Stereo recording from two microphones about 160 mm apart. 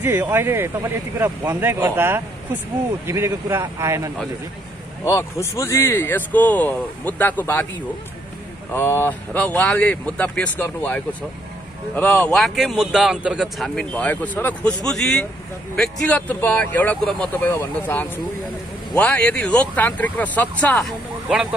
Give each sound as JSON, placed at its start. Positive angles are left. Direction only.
{"t": 0.0, "sound": "speech", "side_deg": -15}
{"t": 5.0, "sound": "speech", "side_deg": 15}
{"t": 8.7, "sound": "a man's voice", "side_deg": 15}